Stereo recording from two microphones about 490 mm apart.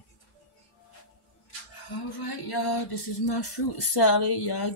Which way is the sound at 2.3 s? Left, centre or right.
Left.